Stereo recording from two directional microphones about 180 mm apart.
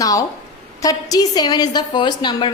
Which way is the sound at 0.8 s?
20° left (ahead or behind).